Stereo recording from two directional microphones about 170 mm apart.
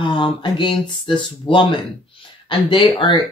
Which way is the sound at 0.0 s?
30° left (ahead or behind).